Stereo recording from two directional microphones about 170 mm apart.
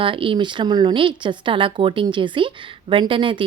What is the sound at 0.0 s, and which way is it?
Speech, 30° right (ahead or behind).